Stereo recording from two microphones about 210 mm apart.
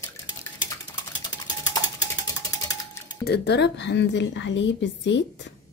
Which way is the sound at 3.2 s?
50° left (ahead or behind).